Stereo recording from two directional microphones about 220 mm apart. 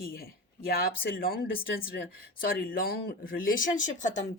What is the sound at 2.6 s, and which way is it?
Speech, 40° left (ahead or behind).